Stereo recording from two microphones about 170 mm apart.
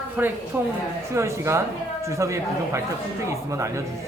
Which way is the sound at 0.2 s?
10° right (ahead or behind).